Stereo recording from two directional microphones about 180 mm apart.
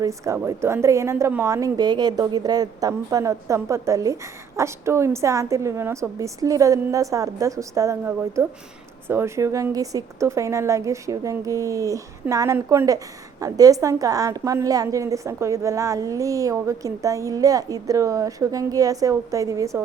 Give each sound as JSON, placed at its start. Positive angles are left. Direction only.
{"t": 0.0, "sound": "a woman's voice", "side_deg": -15}